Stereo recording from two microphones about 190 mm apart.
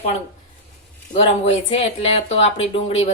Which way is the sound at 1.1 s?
35° left (ahead or behind).